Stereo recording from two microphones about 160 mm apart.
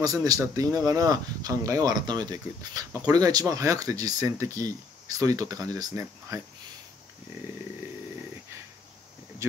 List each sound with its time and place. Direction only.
0.0 s speech: 20° right (ahead or behind)